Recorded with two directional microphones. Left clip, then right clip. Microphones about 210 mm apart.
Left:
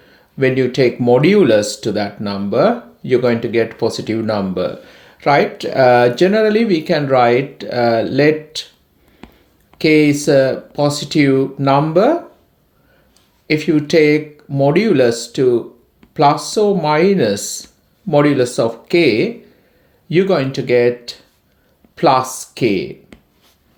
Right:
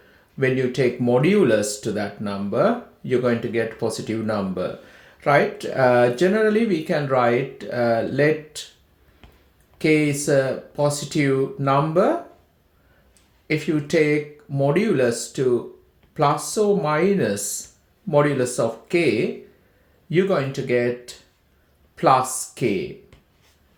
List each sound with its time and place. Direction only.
0.3 s speech: 35° left (ahead or behind)
9.7 s speech: 40° left (ahead or behind)
13.5 s speech: 35° left (ahead or behind)